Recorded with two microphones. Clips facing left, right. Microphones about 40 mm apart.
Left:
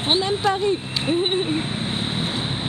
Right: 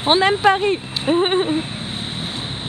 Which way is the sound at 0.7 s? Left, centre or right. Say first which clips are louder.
Right 3 dB; right.